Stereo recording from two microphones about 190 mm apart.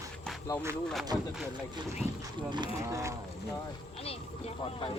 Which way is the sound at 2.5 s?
20° right (ahead or behind).